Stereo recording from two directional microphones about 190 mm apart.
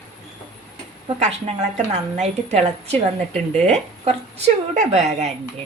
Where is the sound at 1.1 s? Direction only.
35° right (ahead or behind).